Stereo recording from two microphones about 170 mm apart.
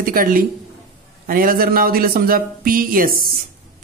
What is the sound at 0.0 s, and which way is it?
Speech, 55° right (ahead or behind).